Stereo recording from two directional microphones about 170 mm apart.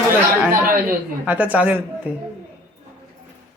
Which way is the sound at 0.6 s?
55° right (ahead or behind).